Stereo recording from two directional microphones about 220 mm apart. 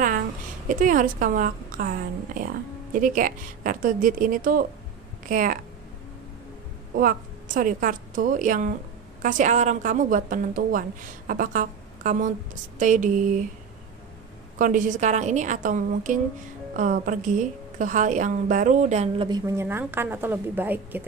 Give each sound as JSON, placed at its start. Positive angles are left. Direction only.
{"t": 0.7, "sound": "a woman's voice", "side_deg": -35}
{"t": 7.0, "sound": "a woman's voice", "side_deg": -40}
{"t": 14.6, "sound": "a woman's voice", "side_deg": -35}